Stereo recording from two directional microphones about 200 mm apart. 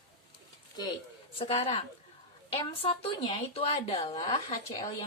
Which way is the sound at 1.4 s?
30° left (ahead or behind).